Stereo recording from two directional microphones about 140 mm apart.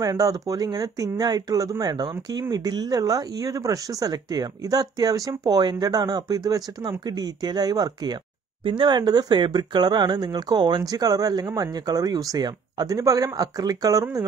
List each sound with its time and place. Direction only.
0.0 s speech: 25° right (ahead or behind)